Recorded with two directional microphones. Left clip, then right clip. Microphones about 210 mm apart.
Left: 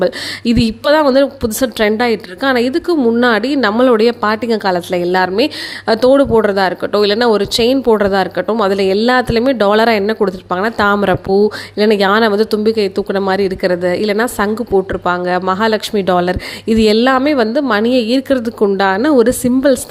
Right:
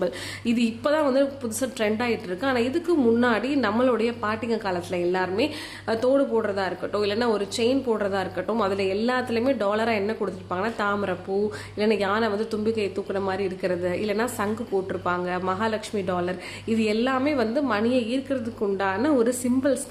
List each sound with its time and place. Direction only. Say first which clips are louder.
0.0 s a woman's voice: left 12 dB; 40° left (ahead or behind)